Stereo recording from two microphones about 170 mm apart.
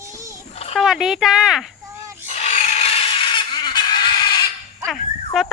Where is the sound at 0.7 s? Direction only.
Centre (ahead or behind).